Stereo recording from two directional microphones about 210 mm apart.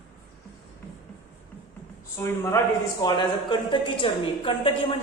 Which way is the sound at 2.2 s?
15° left (ahead or behind).